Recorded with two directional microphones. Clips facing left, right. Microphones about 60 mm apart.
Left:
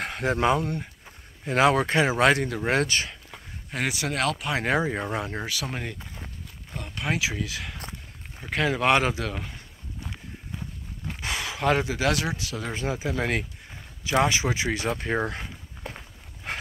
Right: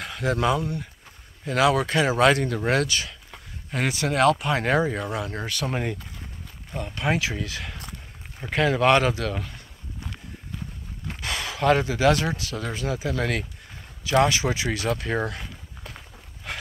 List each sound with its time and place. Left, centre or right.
0.0 s speech: left; by 2.8 s centre
2.8 s speech: left
3.3 s speech: centre
4.9 s speech: left
5.4 s speech: centre
5.7 s speech: centre
5.9 s a sound: left
6.7 s speech: centre
11.1 s speech: centre
12.7 s speech: left
16.5 s a sound: left